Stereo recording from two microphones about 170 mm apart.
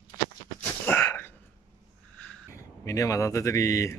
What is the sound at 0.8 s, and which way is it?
Sneeze, 15° left (ahead or behind).